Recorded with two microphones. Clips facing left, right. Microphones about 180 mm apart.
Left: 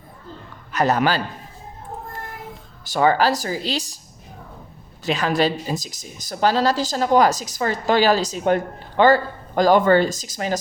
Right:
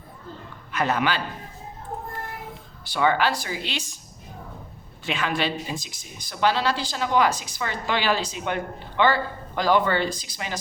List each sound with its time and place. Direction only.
0.7 s a man's voice: 40° left (ahead or behind)
2.8 s speech: 40° left (ahead or behind)
5.0 s speech: 40° left (ahead or behind)